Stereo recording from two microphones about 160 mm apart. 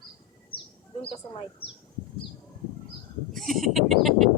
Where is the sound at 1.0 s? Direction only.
35° left (ahead or behind).